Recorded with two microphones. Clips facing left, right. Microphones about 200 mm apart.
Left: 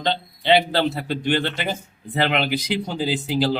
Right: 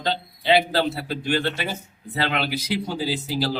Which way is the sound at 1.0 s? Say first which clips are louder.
Left 2 dB; 20° left (ahead or behind).